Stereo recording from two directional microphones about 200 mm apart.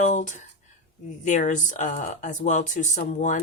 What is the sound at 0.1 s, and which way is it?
Speech, 35° left (ahead or behind).